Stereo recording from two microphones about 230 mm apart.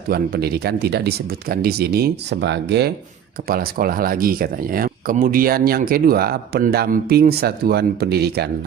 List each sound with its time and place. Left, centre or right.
0.1 s speech: right